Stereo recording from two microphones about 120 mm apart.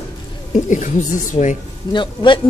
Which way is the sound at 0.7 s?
90° left.